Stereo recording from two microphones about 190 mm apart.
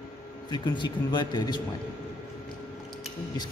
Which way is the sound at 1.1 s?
20° left (ahead or behind).